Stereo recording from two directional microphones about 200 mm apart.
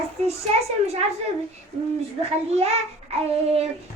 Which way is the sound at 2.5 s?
30° right (ahead or behind).